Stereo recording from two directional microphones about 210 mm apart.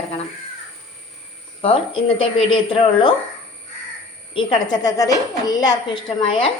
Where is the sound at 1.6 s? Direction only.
25° left (ahead or behind).